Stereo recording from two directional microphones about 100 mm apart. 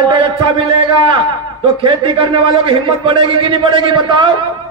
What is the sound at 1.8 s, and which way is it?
A man's voice, 50° right (ahead or behind).